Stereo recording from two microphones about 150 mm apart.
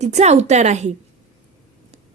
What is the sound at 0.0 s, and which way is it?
A woman's voice, 50° right (ahead or behind).